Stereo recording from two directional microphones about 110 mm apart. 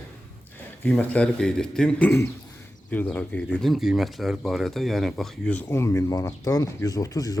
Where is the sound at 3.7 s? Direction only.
Centre (ahead or behind).